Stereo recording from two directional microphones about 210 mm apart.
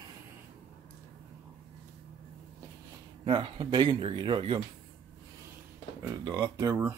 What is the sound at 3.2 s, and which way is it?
Speech, 20° right (ahead or behind).